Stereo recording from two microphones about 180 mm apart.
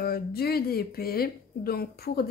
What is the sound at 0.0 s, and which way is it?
Speech, 60° left (ahead or behind).